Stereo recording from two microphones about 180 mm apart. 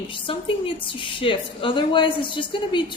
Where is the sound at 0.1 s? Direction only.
30° left (ahead or behind).